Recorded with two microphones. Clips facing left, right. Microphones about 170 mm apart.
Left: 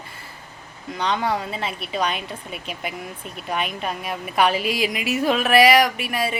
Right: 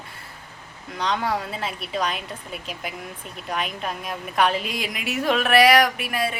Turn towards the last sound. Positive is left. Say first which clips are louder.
# left 1 dB
turn(degrees=0)  # may be behind; listen again after turning